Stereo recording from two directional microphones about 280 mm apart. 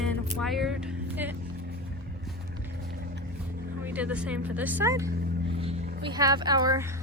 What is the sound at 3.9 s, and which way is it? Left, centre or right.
Speech, centre.